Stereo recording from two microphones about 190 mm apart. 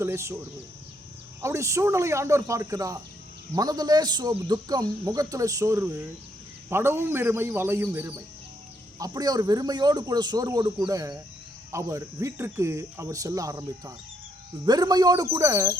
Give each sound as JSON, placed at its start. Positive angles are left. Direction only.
{"t": 0.0, "sound": "speech", "side_deg": -15}
{"t": 1.4, "sound": "speech", "side_deg": -15}